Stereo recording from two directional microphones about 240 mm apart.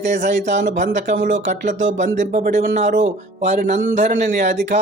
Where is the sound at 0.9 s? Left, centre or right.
Right.